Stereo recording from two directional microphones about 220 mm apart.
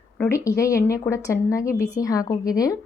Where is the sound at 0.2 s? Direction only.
15° left (ahead or behind).